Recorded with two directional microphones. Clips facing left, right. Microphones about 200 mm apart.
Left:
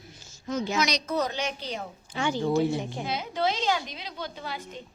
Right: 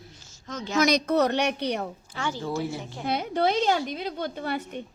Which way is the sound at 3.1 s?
60° right (ahead or behind).